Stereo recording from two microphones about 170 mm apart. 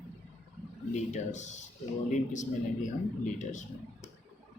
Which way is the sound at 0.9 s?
45° left (ahead or behind).